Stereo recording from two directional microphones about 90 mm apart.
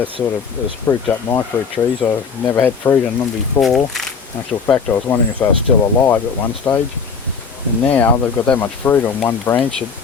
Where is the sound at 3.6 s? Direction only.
Centre (ahead or behind).